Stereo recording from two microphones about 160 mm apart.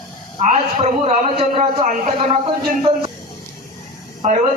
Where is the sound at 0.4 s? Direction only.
55° right (ahead or behind).